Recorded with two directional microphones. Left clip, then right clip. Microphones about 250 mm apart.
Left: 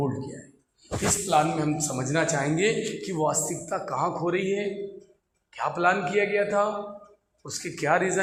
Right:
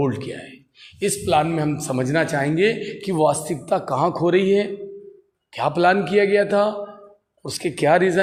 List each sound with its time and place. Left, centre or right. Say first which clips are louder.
0.0 s a man's voice: right 7 dB; right
1.3 s a man's voice: right 4 dB; right